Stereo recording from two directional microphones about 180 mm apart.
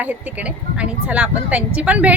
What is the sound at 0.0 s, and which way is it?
Speech, 10° right (ahead or behind).